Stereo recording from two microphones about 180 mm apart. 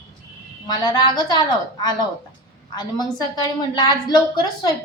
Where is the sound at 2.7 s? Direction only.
25° left (ahead or behind).